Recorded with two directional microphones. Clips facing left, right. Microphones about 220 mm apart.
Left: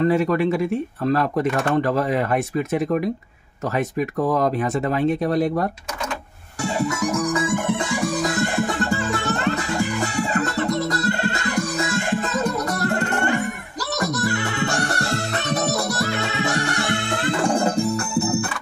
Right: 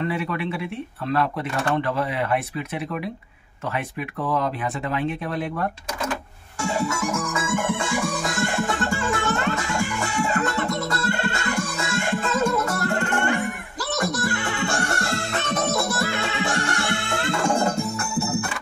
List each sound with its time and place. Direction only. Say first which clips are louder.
0.0 s speech: left 8 dB; 40° left (ahead or behind)
7.0 s music: left 5 dB; 35° left (ahead or behind)